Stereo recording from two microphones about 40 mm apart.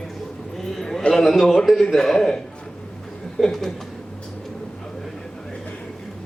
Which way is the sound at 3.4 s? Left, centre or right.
Centre.